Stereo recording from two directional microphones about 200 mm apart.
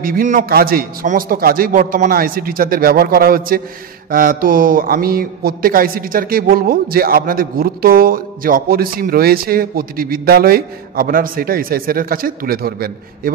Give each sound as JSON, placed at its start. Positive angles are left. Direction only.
{"t": 0.0, "sound": "speech", "side_deg": -45}